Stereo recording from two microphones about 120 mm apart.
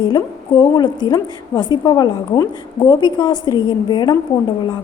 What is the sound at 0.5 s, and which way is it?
A woman's voice, 45° left (ahead or behind).